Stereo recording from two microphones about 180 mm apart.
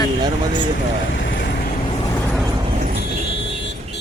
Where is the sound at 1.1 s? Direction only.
90° left.